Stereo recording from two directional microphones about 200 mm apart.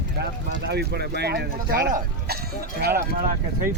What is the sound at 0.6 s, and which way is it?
Speech, 55° right (ahead or behind).